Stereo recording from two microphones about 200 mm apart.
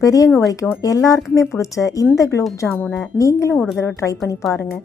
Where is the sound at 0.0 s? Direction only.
15° left (ahead or behind).